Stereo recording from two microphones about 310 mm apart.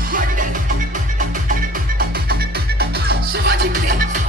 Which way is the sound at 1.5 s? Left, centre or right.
Right.